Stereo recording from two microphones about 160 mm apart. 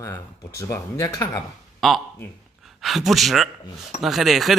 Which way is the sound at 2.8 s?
Centre (ahead or behind).